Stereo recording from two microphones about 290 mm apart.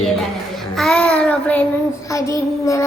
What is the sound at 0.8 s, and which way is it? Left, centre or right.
Child singing, centre.